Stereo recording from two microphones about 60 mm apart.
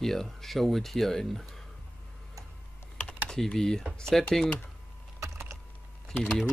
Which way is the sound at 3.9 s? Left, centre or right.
Centre.